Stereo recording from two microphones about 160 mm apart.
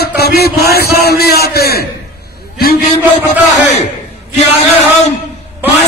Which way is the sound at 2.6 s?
60° left (ahead or behind).